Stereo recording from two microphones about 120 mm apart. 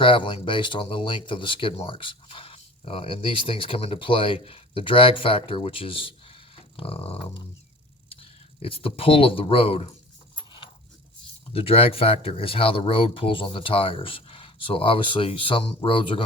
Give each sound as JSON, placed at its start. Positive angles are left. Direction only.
{"t": 0.0, "sound": "speech", "side_deg": 45}
{"t": 10.3, "sound": "a sound", "side_deg": 40}
{"t": 11.5, "sound": "speech", "side_deg": 50}